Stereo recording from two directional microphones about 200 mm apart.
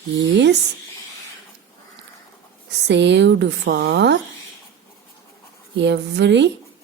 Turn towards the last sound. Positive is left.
turn(degrees=-60)  # may be behind; listen again after turning